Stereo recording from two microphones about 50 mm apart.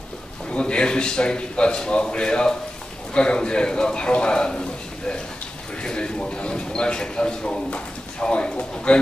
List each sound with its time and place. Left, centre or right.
0.5 s a man's voice: left